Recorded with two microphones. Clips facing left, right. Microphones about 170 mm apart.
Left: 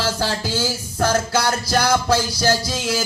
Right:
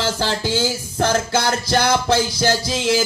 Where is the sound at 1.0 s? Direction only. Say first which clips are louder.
Even; 25° right (ahead or behind).